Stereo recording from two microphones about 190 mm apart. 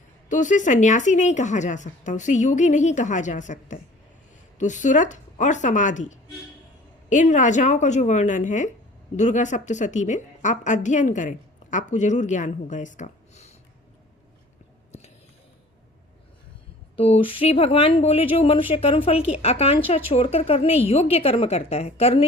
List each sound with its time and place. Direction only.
0.3 s a woman's voice: 40° left (ahead or behind)
17.0 s a woman's voice: 30° left (ahead or behind)